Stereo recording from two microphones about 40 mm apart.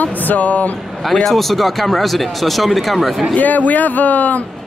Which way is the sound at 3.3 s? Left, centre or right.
Left.